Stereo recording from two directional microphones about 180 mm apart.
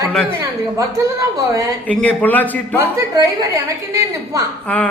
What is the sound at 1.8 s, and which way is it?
Speech, 10° left (ahead or behind).